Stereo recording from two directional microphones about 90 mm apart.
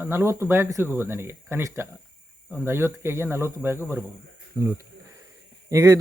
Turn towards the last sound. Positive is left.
turn(degrees=-35)  # may be behind; listen again after turning